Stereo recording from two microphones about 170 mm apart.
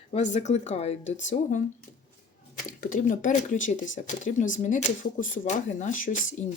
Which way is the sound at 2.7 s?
50° left (ahead or behind).